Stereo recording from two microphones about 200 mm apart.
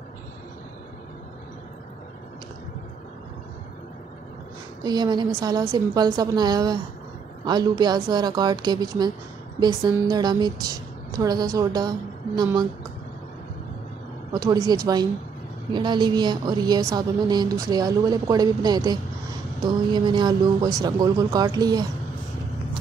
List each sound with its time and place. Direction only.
4.8 s a woman's voice: 20° right (ahead or behind)
14.4 s a woman's voice: 20° right (ahead or behind)